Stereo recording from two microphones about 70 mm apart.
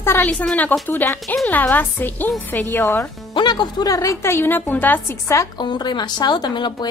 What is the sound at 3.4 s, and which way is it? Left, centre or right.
Speech, left.